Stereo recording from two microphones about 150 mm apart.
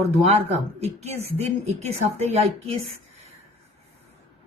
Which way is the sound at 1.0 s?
45° right (ahead or behind).